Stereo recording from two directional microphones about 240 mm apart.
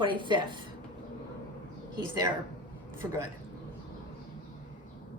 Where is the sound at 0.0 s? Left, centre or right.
Centre.